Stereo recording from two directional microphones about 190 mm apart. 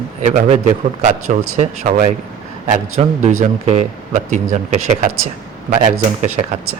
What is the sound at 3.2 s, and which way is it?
Speech, 40° right (ahead or behind).